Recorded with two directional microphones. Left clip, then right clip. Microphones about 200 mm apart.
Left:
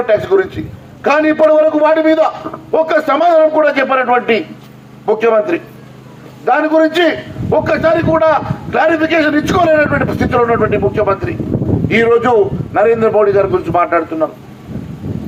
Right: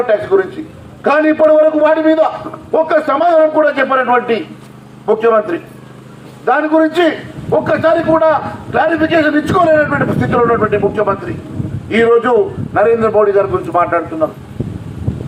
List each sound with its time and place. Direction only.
0.0 s a man's voice: 35° left (ahead or behind)